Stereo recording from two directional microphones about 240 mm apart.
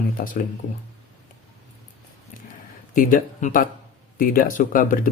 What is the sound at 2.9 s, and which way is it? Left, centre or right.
Speech, left.